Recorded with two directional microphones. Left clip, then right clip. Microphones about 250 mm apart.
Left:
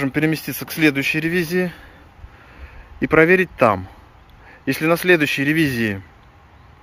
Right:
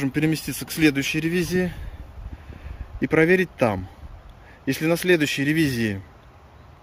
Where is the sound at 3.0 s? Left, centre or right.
Centre.